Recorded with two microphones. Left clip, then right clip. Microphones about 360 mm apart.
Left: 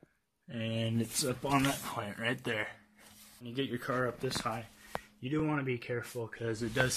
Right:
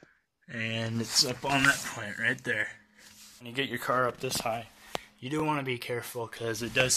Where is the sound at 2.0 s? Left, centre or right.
Centre.